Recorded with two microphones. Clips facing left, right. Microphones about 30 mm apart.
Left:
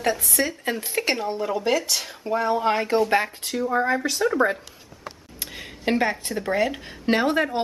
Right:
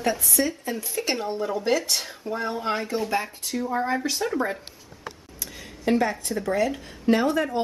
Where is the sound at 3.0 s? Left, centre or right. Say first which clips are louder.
Left 5 dB; left.